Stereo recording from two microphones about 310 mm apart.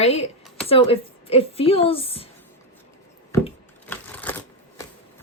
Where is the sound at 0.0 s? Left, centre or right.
Left.